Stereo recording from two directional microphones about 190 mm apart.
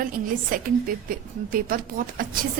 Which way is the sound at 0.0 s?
45° right (ahead or behind).